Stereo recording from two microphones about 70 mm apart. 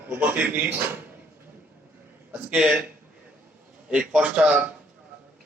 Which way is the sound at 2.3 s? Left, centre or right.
Centre.